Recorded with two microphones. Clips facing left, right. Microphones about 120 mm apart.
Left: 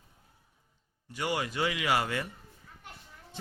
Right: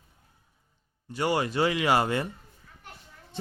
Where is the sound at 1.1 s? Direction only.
35° right (ahead or behind).